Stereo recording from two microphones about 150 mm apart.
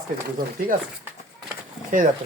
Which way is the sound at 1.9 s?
60° right (ahead or behind).